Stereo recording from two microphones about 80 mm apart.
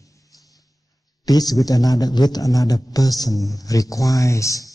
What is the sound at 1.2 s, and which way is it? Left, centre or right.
Speech, left.